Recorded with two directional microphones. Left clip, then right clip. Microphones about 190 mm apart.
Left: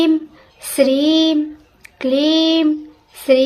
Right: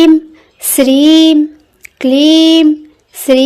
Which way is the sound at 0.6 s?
45° right (ahead or behind).